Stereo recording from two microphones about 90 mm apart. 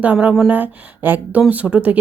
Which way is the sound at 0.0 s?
15° right (ahead or behind).